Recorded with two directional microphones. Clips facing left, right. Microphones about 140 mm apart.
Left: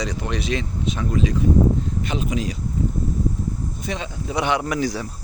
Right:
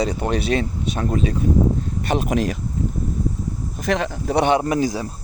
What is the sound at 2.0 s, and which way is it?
Speech, 55° right (ahead or behind).